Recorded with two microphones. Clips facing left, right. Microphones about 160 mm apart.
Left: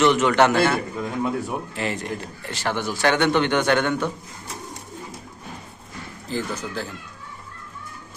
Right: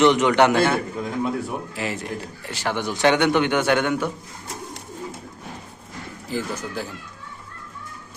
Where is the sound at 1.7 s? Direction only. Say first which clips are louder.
Left 1 dB; 5° right (ahead or behind).